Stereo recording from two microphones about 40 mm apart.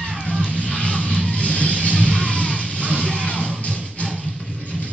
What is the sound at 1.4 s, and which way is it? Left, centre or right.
Vehicle, left.